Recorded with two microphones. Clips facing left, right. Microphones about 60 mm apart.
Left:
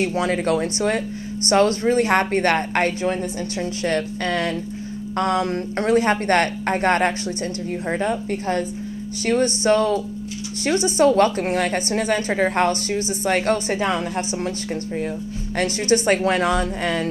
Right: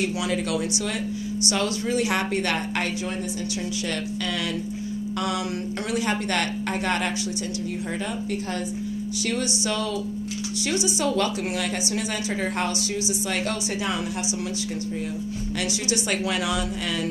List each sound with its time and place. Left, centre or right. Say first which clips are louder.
0.0 s a woman's voice: left 5 dB; left
15.6 s a woman's voice: left 10 dB; left